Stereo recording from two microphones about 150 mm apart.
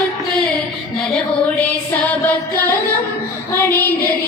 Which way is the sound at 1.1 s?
10° left (ahead or behind).